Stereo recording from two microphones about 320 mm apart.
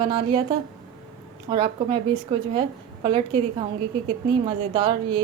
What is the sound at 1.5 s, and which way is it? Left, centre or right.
Speech, centre.